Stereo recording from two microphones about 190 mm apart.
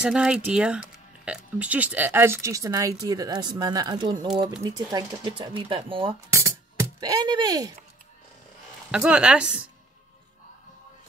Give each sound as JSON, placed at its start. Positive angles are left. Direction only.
{"t": 0.0, "sound": "speech", "side_deg": -5}
{"t": 6.3, "sound": "a sound", "side_deg": -15}
{"t": 8.9, "sound": "speech", "side_deg": -5}